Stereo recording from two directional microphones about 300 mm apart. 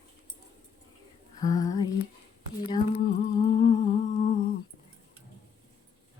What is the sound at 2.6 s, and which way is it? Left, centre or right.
Humming, centre.